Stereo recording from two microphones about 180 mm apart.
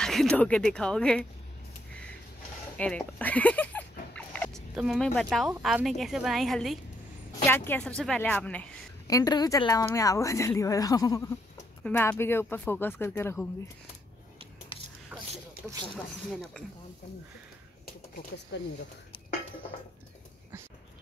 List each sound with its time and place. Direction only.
0.0 s speech: 5° left (ahead or behind)
2.8 s speech: 10° left (ahead or behind)
4.1 s dog: 5° left (ahead or behind)
4.7 s a woman's voice: centre (ahead or behind)
7.4 s speech: 10° left (ahead or behind)
9.0 s speech: 20° left (ahead or behind)
15.1 s a sound: 10° right (ahead or behind)